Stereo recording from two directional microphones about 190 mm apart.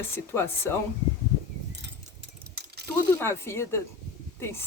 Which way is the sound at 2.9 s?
10° left (ahead or behind).